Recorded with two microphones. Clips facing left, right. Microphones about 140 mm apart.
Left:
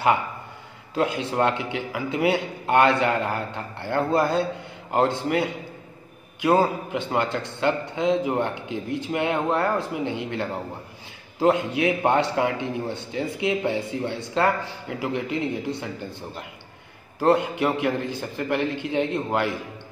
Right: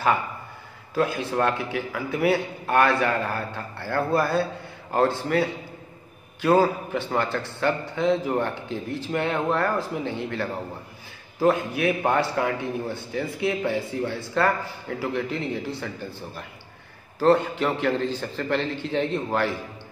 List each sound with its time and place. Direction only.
0.9 s a man's voice: 20° left (ahead or behind)